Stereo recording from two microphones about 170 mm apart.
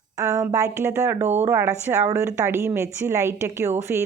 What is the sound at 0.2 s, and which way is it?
Speech, 20° right (ahead or behind).